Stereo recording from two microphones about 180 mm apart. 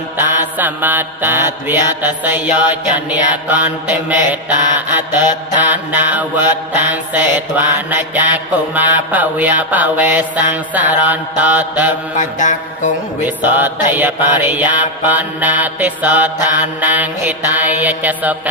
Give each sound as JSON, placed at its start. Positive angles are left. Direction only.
{"t": 0.2, "sound": "mantra", "side_deg": -10}
{"t": 12.1, "sound": "mantra", "side_deg": 45}
{"t": 13.2, "sound": "mantra", "side_deg": -10}